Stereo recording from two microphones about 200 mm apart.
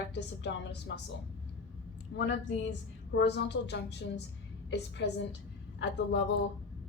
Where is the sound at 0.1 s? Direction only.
60° left (ahead or behind).